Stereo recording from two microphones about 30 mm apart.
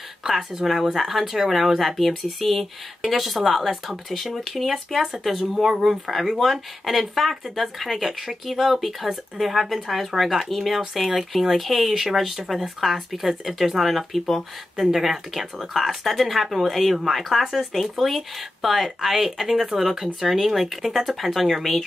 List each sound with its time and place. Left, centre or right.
0.2 s speech: centre
1.2 s speech: centre
2.2 s speech: centre
14.8 s speech: centre
17.4 s speech: centre
17.7 s speech: centre